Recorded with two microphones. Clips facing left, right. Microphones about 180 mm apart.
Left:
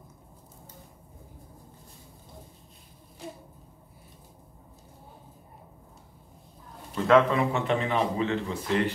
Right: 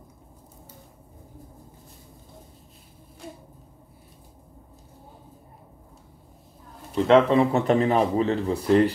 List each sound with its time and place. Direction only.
7.1 s speech: 25° right (ahead or behind)